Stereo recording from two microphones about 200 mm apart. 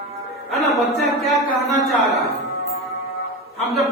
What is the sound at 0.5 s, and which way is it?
Music, centre (ahead or behind).